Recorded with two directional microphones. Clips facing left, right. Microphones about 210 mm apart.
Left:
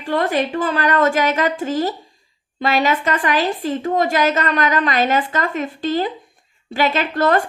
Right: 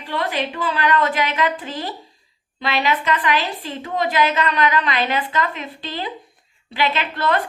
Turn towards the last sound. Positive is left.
turn(degrees=45)  # may be behind; listen again after turning